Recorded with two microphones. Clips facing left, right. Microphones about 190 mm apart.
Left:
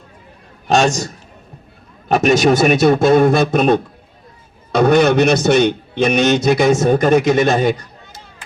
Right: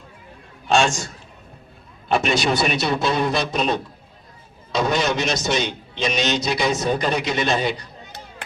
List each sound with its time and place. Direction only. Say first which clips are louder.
0.7 s a man's voice: left 4 dB; 40° left (ahead or behind)